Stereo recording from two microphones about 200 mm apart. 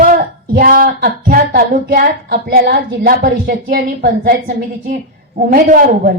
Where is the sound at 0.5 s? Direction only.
45° right (ahead or behind).